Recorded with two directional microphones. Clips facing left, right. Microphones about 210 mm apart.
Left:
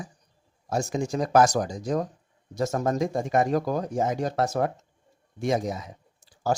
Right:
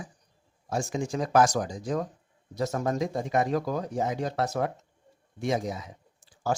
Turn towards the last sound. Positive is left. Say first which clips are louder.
# left 3 dB
turn(degrees=40)  # may be behind; listen again after turning